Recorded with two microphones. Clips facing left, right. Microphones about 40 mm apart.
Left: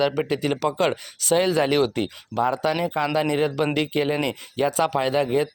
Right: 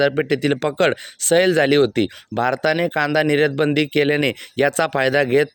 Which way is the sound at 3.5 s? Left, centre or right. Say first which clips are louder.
Right 5 dB; right.